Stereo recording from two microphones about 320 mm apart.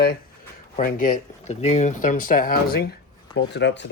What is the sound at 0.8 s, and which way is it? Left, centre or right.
Speech, left.